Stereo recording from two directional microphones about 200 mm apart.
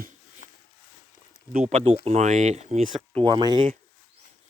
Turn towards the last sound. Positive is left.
turn(degrees=-20)  # may be behind; listen again after turning